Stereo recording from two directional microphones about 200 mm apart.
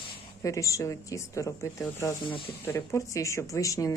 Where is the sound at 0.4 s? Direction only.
15° left (ahead or behind).